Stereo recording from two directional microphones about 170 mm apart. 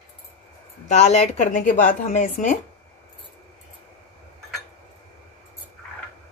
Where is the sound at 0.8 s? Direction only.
40° left (ahead or behind).